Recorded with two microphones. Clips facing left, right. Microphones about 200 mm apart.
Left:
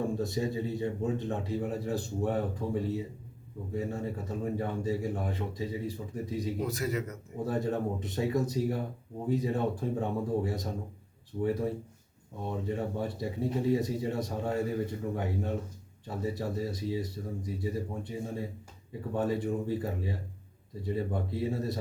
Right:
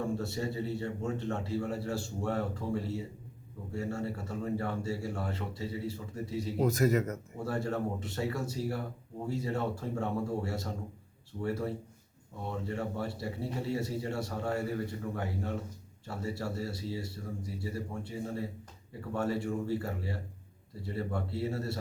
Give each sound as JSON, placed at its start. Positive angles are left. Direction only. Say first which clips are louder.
{"t": 0.0, "sound": "speech", "louder": "left 3 dB", "side_deg": 15}
{"t": 6.6, "sound": "a man's voice", "louder": "right 5 dB", "side_deg": -45}
{"t": 7.3, "sound": "speech", "louder": "left 3 dB", "side_deg": 20}